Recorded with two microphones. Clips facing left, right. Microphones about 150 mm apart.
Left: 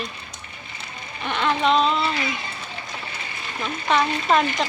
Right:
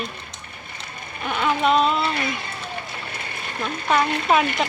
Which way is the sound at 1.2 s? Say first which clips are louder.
Right 1 dB; 5° right (ahead or behind).